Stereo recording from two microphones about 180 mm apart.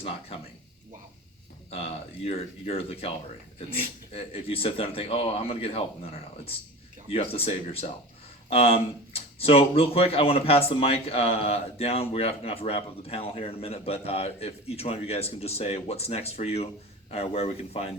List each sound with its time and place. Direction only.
0.0 s speech: 30° left (ahead or behind)
1.7 s speech: 35° left (ahead or behind)